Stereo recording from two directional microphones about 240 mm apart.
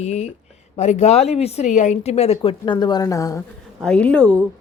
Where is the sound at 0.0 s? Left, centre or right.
Left; by 4.4 s centre.